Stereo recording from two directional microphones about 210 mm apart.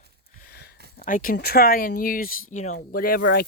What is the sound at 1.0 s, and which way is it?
Speech, 40° left (ahead or behind).